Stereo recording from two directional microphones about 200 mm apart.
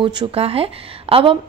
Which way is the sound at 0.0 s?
25° right (ahead or behind).